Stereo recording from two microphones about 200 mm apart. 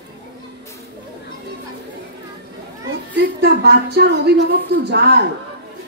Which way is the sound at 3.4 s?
55° right (ahead or behind).